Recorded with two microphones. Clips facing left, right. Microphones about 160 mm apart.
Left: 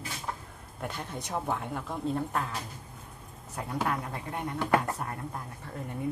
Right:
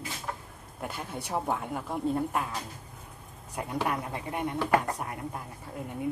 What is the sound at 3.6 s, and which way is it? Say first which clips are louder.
Speech: right 2 dB; 15° right (ahead or behind).